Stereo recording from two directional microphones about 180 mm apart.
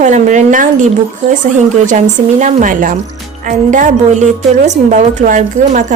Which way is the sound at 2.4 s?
45° right (ahead or behind).